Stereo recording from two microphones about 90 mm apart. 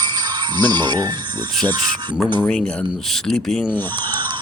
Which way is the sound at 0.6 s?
55° right (ahead or behind).